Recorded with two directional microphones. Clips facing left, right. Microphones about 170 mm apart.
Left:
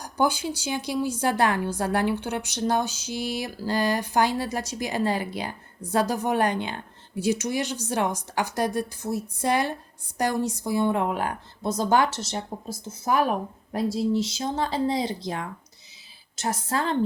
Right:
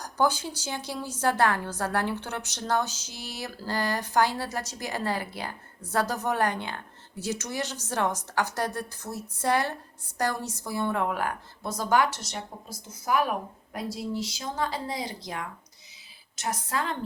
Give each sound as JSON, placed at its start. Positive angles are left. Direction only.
{"t": 0.0, "sound": "a woman's voice", "side_deg": 10}